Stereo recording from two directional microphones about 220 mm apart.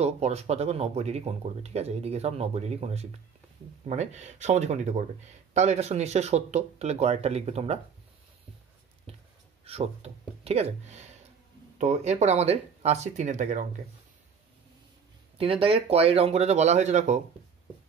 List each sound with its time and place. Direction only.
0.0 s speech: 30° right (ahead or behind)
9.1 s a sound: 25° right (ahead or behind)
9.7 s speech: 30° right (ahead or behind)
15.3 s speech: 25° right (ahead or behind)